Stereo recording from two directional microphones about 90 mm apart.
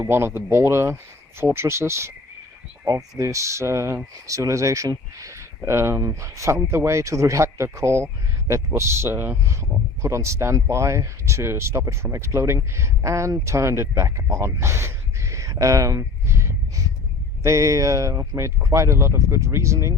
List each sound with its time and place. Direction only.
0.0 s speech: 25° right (ahead or behind)
2.8 s speech: 40° right (ahead or behind)